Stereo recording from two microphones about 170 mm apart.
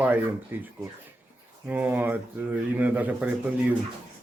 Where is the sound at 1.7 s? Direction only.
10° right (ahead or behind).